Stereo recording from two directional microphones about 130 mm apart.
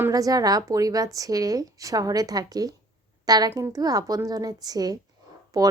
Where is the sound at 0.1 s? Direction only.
30° right (ahead or behind).